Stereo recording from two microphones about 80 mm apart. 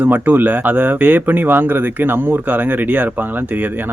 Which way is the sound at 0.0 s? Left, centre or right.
Right.